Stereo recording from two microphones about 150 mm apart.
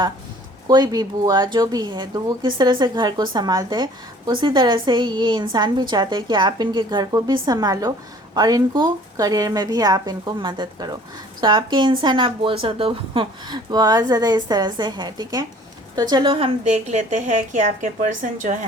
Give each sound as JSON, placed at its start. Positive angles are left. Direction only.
{"t": 0.7, "sound": "a woman's voice", "side_deg": -25}
{"t": 16.6, "sound": "a woman's voice", "side_deg": -50}